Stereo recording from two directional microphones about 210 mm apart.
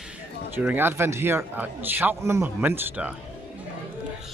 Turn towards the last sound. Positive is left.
turn(degrees=-10)  # may be behind; listen again after turning